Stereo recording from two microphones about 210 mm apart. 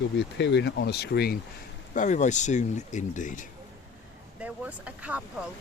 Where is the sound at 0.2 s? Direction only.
60° left (ahead or behind).